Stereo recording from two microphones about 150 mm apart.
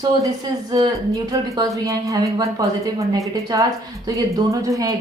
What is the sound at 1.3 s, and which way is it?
A woman's voice, 25° right (ahead or behind).